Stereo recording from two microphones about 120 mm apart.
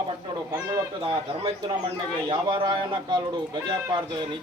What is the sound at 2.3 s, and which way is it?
Speech, 40° right (ahead or behind).